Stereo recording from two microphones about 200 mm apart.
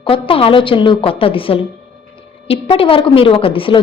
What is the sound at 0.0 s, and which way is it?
A woman's voice, 25° left (ahead or behind).